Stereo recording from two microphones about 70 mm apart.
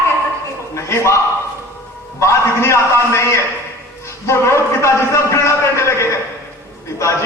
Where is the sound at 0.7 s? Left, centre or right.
Left.